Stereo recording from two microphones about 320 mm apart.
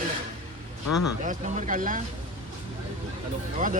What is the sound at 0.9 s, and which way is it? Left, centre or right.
Speech, left.